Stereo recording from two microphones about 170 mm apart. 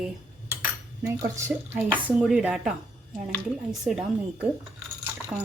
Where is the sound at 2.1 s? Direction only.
5° right (ahead or behind).